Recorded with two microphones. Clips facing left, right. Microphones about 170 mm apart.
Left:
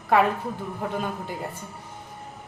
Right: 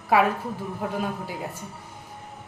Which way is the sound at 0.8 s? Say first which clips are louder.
Right 1 dB; 5° right (ahead or behind).